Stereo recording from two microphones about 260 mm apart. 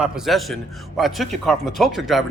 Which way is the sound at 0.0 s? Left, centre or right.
Centre.